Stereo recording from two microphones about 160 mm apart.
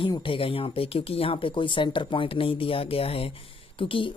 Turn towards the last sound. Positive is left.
turn(degrees=35)  # may be behind; listen again after turning